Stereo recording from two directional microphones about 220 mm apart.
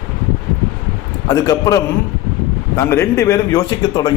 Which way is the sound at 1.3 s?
15° left (ahead or behind).